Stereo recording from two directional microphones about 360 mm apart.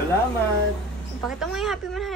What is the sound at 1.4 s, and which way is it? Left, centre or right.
Speech, centre.